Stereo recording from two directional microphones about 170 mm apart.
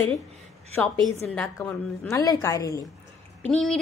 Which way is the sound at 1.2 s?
10° left (ahead or behind).